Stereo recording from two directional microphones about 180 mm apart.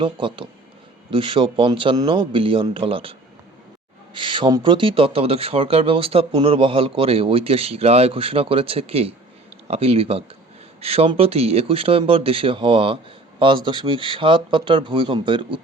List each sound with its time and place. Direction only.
0.0 s speech: 25° right (ahead or behind)